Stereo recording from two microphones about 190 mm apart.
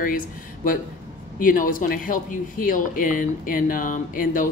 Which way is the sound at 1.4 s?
45° left (ahead or behind).